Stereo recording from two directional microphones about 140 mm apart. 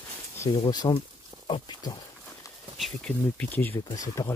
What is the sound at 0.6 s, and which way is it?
Speech, 30° left (ahead or behind).